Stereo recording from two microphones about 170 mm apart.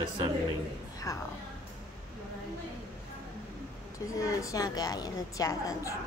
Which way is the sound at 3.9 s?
20° left (ahead or behind).